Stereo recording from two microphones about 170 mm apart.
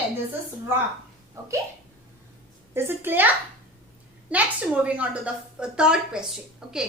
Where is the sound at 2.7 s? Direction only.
15° right (ahead or behind).